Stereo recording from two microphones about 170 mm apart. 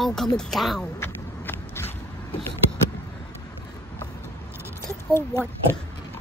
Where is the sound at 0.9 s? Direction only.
10° left (ahead or behind).